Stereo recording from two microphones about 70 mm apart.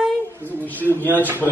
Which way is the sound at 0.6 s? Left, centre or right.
Left.